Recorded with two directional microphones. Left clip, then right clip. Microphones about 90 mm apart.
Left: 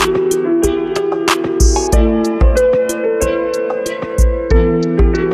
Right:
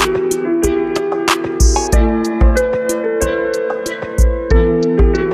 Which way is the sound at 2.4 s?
40° left (ahead or behind).